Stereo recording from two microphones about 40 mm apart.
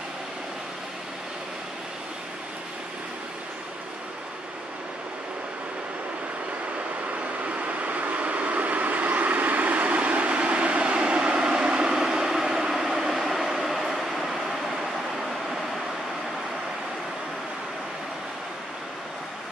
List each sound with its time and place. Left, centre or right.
7.4 s vehicle: right; by 14.3 s centre